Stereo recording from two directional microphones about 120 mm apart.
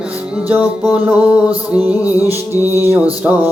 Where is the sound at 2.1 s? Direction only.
30° left (ahead or behind).